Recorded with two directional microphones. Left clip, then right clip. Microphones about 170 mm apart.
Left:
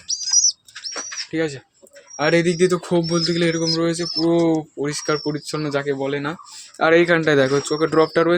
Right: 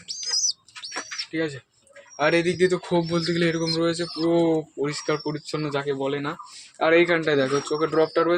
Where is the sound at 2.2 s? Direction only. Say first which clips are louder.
Left 3 dB; 30° left (ahead or behind).